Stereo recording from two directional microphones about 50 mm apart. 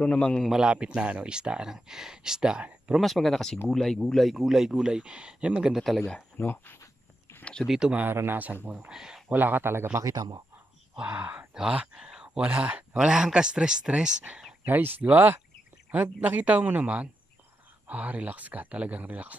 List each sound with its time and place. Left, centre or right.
0.0 s a man's voice: left
0.5 s speech: centre
3.0 s speech: centre
5.8 s speech: centre
6.3 s speech: left
7.6 s speech: centre
8.1 s speech: right
8.8 s speech: centre
9.3 s speech: right
11.0 s speech: right
11.7 s speech: centre
12.4 s speech: right
12.9 s speech: centre
14.6 s speech: right